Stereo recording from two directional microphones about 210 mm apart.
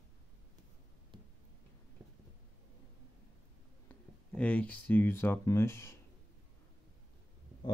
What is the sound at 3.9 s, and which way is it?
Speech, 5° left (ahead or behind).